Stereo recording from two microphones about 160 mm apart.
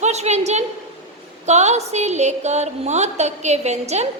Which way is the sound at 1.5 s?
45° right (ahead or behind).